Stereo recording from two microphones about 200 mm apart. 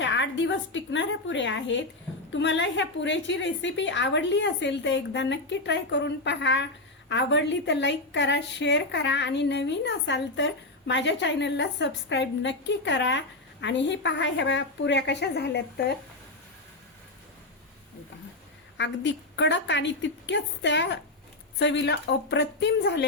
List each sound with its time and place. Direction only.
0.0 s a woman's voice: 65° left (ahead or behind)
18.8 s a woman's voice: 65° left (ahead or behind)